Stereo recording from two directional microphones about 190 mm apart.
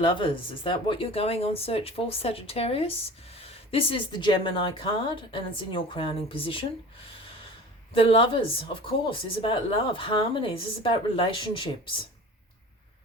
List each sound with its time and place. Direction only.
0.0 s speech: 25° left (ahead or behind)
7.9 s speech: 30° left (ahead or behind)